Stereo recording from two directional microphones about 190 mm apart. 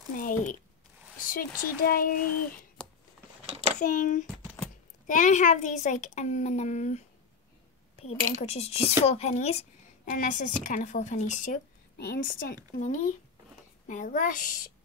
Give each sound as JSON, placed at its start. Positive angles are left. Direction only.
{"t": 0.2, "sound": "a woman's voice", "side_deg": 45}
{"t": 3.4, "sound": "a sound", "side_deg": -30}
{"t": 3.8, "sound": "a woman's voice", "side_deg": 40}